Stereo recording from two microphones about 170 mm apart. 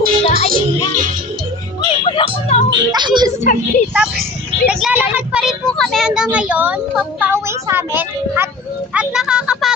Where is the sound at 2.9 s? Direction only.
25° right (ahead or behind).